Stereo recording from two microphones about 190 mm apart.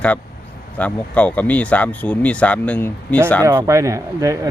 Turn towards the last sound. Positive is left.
turn(degrees=-15)  # may be behind; listen again after turning